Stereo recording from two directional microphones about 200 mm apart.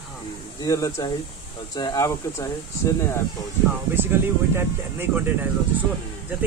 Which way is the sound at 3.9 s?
10° right (ahead or behind).